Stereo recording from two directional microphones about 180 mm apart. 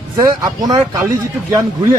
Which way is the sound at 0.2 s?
20° right (ahead or behind).